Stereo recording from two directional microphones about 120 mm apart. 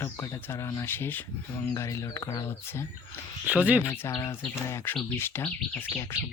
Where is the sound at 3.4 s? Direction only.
10° right (ahead or behind).